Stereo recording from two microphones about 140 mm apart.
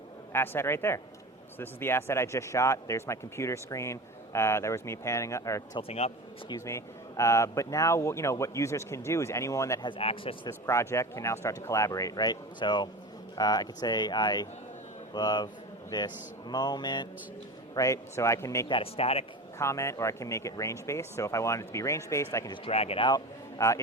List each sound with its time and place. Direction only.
0.3 s speech: 15° left (ahead or behind)
6.0 s speech: 45° left (ahead or behind)
6.5 s speech: 20° left (ahead or behind)
9.8 s speech: 40° left (ahead or behind)
10.7 s speech: 20° left (ahead or behind)
18.7 s speech: 45° left (ahead or behind)
19.5 s speech: 20° left (ahead or behind)
22.6 s speech: 45° left (ahead or behind)
23.0 s a man's voice: 25° left (ahead or behind)